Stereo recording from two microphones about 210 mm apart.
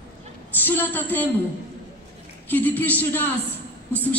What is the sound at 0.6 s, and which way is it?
Speech, 10° left (ahead or behind).